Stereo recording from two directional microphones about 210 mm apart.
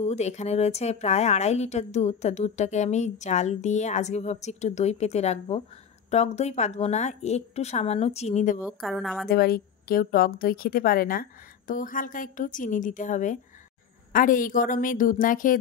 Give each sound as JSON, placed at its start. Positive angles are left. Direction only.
{"t": 0.0, "sound": "a woman's voice", "side_deg": 30}
{"t": 8.6, "sound": "a woman's voice", "side_deg": 0}
{"t": 9.3, "sound": "a woman's voice", "side_deg": 45}